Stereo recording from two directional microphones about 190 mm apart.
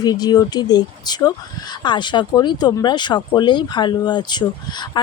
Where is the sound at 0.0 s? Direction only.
20° left (ahead or behind).